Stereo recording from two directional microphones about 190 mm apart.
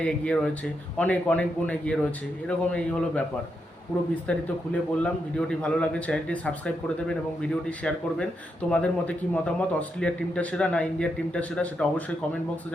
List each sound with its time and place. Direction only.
0.0 s a man's voice: 5° left (ahead or behind)
4.3 s a man's voice: 5° left (ahead or behind)